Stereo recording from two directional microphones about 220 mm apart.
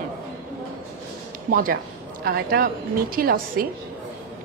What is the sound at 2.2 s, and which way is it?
A woman's voice, 45° right (ahead or behind).